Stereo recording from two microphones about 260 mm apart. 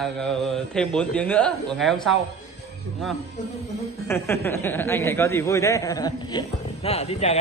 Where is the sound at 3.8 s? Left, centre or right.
Centre.